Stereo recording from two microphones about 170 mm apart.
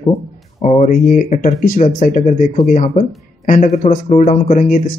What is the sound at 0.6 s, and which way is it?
Speech, 40° left (ahead or behind).